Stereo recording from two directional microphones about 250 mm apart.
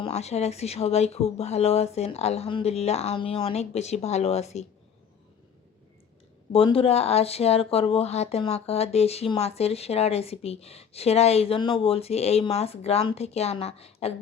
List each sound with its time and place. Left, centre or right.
0.0 s speech: left
6.5 s speech: left